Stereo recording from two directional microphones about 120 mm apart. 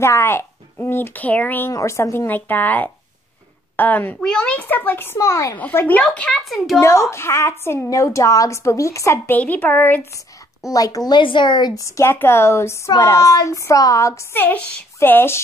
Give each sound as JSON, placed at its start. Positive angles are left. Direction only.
{"t": 0.0, "sound": "speech", "side_deg": 20}
{"t": 1.7, "sound": "speech", "side_deg": 25}
{"t": 5.6, "sound": "speech", "side_deg": 15}
{"t": 6.8, "sound": "speech", "side_deg": 25}
{"t": 10.7, "sound": "speech", "side_deg": 30}
{"t": 11.1, "sound": "speech", "side_deg": 40}